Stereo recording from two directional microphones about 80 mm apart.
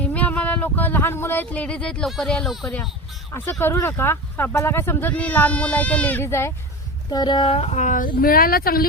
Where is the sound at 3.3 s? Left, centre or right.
Left.